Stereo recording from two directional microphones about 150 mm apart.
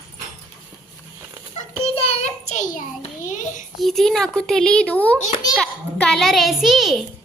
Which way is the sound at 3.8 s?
Centre (ahead or behind).